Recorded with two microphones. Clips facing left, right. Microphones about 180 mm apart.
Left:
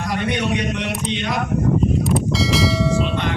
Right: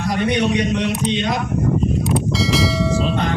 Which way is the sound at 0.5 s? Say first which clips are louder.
Right 4 dB; 30° right (ahead or behind).